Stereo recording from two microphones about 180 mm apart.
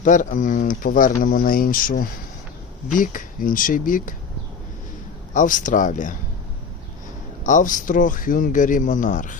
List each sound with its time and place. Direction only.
0.0 s speech: 45° left (ahead or behind)
5.3 s speech: 45° left (ahead or behind)
7.4 s speech: 45° left (ahead or behind)